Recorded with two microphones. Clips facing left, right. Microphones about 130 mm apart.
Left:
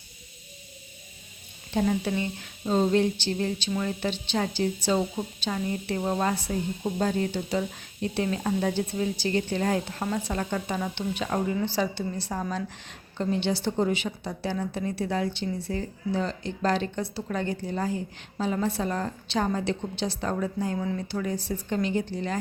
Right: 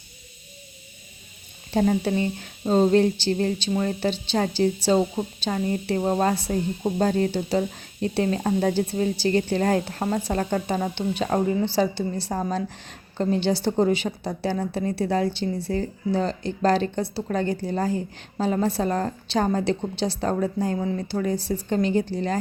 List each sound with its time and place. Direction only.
1.7 s a woman's voice: 40° right (ahead or behind)